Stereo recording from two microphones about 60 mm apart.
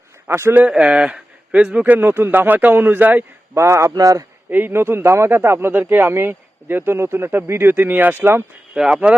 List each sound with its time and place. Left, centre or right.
0.3 s speech: right
0.8 s speech: centre
1.9 s a man's voice: right
3.5 s speech: right
3.9 s a man's voice: right
4.4 s a man's voice: right
8.7 s speech: centre